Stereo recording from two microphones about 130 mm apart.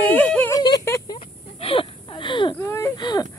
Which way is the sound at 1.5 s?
40° left (ahead or behind).